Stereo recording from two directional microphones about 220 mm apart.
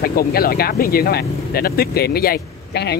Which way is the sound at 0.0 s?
45° left (ahead or behind).